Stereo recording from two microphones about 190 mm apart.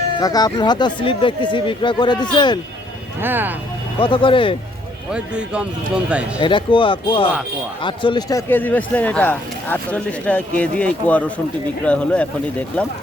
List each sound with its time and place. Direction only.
0.2 s speech: 20° left (ahead or behind)
3.2 s speech: 10° right (ahead or behind)
4.0 s speech: 25° left (ahead or behind)
5.1 s speech: 5° right (ahead or behind)
6.4 s speech: 25° left (ahead or behind); by 12.9 s 5° left (ahead or behind)